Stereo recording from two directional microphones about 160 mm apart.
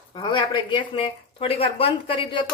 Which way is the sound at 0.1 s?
30° left (ahead or behind).